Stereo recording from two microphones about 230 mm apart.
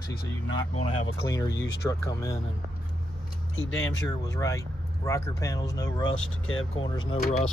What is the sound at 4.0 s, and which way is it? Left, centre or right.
Speech, centre.